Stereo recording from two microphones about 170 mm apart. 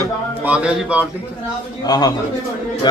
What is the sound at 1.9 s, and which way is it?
Speech, 25° left (ahead or behind).